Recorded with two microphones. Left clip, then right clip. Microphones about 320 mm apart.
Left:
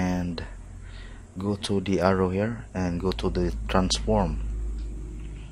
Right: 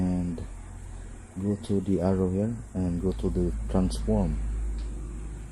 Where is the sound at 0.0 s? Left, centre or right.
Left.